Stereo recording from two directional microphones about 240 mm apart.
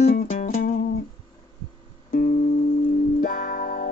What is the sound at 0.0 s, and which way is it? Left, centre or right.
Music, left.